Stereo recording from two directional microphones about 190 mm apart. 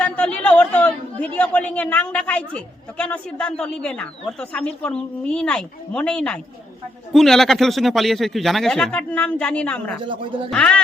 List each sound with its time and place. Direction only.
0.0 s a man's voice: 10° left (ahead or behind)
10.1 s speech: 25° right (ahead or behind)
10.5 s speech: 5° left (ahead or behind)